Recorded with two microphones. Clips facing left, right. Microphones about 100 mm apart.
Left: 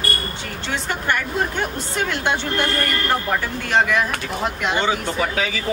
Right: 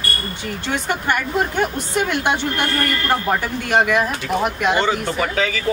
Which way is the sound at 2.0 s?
15° right (ahead or behind).